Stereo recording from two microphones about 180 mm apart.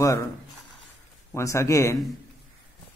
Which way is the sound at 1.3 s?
15° left (ahead or behind).